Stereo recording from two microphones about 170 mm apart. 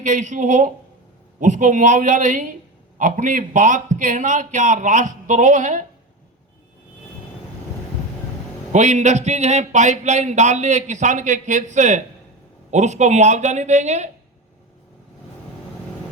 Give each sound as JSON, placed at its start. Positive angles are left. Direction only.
{"t": 0.0, "sound": "speech", "side_deg": -45}
{"t": 8.7, "sound": "speech", "side_deg": -45}